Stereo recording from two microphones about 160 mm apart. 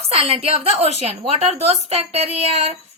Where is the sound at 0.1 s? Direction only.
35° right (ahead or behind).